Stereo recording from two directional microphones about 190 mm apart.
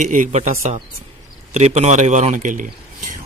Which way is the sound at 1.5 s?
35° right (ahead or behind).